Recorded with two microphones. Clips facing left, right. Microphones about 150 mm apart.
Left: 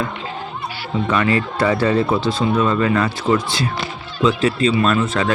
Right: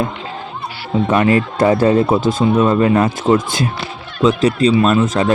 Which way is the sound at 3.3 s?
45° right (ahead or behind).